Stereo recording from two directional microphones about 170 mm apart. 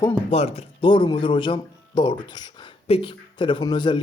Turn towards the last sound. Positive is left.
turn(degrees=25)  # may be behind; listen again after turning